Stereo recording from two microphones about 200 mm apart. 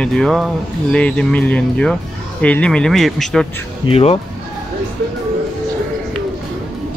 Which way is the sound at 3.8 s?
30° left (ahead or behind).